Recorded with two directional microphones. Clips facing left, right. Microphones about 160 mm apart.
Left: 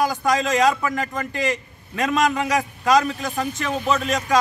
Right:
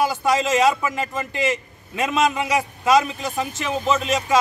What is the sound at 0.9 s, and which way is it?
A man's voice, 20° right (ahead or behind).